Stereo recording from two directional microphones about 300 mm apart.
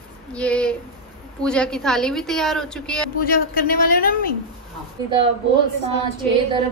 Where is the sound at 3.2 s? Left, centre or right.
Left.